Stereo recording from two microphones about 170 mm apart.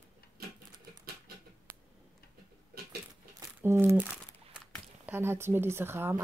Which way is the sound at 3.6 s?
15° right (ahead or behind).